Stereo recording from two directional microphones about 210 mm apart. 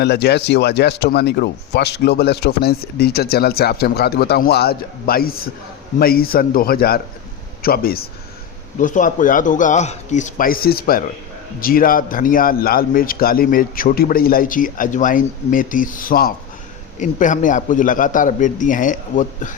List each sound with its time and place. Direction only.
0.0 s a man's voice: 50° left (ahead or behind)